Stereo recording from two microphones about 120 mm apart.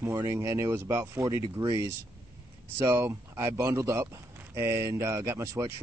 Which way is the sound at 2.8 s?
20° right (ahead or behind).